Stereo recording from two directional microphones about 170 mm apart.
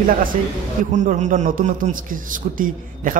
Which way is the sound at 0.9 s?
45° right (ahead or behind).